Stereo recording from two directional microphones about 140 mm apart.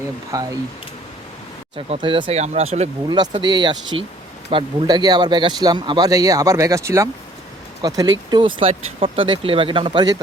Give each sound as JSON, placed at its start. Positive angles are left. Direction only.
{"t": 0.3, "sound": "speech", "side_deg": -25}
{"t": 1.9, "sound": "speech", "side_deg": -35}
{"t": 2.4, "sound": "speech", "side_deg": -50}
{"t": 3.1, "sound": "speech", "side_deg": -30}